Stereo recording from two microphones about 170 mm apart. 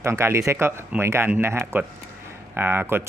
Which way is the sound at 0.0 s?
15° right (ahead or behind).